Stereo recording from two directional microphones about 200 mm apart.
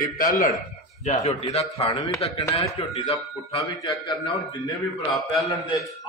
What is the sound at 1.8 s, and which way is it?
A man's voice, 20° left (ahead or behind).